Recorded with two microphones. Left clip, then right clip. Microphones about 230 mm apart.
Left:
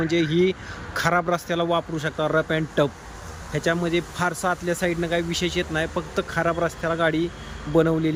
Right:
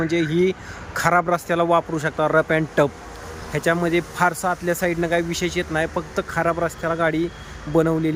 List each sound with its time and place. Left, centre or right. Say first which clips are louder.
0.0 s speech: right 1 dB; centre